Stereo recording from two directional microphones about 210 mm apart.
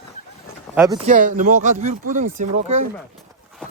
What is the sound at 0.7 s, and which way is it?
Speech, 10° right (ahead or behind).